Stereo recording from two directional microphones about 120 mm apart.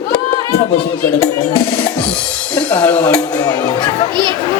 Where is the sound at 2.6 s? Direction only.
15° left (ahead or behind).